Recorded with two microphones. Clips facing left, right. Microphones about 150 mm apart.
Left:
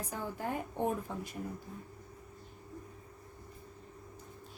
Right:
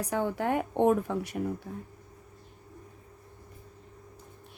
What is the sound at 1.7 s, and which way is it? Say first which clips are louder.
Speech: right 7 dB; 90° right.